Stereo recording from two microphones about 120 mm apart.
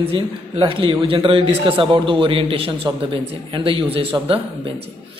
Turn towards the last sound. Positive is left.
turn(degrees=-45)  # may be behind; listen again after turning